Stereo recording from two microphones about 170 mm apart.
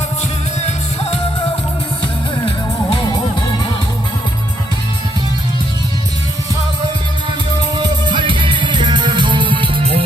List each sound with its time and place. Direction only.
7.8 s music: 25° right (ahead or behind)